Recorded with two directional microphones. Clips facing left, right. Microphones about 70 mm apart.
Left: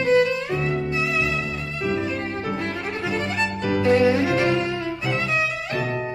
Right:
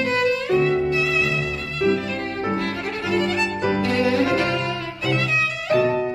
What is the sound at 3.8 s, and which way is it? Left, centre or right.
Violin, left.